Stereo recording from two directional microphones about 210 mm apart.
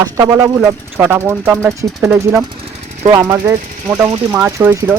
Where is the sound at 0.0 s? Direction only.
15° right (ahead or behind).